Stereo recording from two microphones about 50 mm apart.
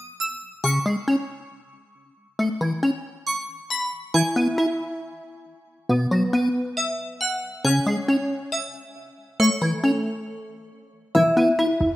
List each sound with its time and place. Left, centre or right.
0.2 s music: centre
2.3 s music: centre
5.9 s music: centre
8.2 s music: centre
9.4 s music: centre
11.1 s music: centre